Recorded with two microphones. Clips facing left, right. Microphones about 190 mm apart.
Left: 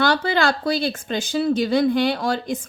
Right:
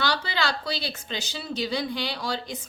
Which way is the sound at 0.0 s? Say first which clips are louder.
Left 8 dB; 50° left (ahead or behind).